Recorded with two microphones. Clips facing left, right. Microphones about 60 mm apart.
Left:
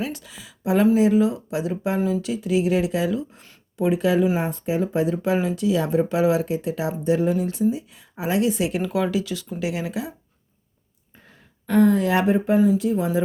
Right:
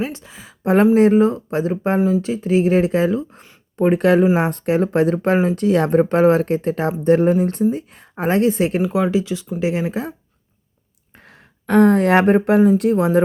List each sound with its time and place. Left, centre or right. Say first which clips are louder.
0.0 s a sound: right 4 dB; right
0.6 s speech: right 5 dB; right
8.8 s speech: right 5 dB; right
11.2 s speech: right 5 dB; right